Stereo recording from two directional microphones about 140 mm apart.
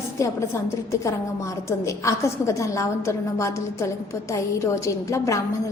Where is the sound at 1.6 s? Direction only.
20° left (ahead or behind).